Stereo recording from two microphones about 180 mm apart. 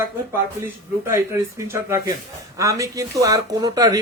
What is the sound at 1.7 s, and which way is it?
A man's voice, 15° right (ahead or behind).